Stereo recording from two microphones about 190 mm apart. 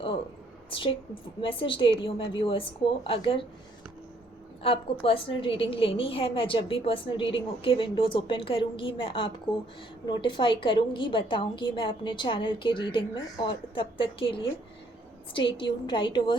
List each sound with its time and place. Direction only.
0.7 s a woman's voice: 25° left (ahead or behind)
4.6 s a woman's voice: 30° left (ahead or behind)
15.5 s a woman's voice: 25° left (ahead or behind)